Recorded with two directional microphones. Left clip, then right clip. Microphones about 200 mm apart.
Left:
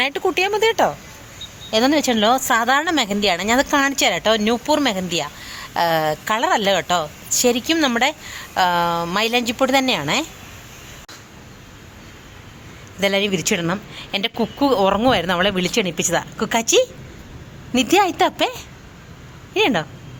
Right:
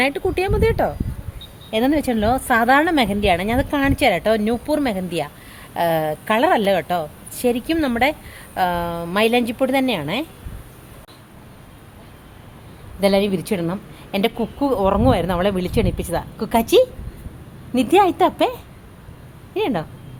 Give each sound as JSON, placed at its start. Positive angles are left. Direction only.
{"t": 0.0, "sound": "a woman's voice", "side_deg": -10}
{"t": 13.0, "sound": "a woman's voice", "side_deg": 0}